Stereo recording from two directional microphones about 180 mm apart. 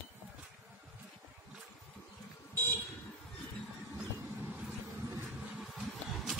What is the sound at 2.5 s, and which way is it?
Vehicle, 10° left (ahead or behind).